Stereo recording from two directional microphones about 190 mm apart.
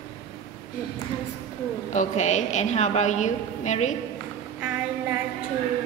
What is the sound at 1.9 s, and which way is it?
A woman's voice, 40° left (ahead or behind).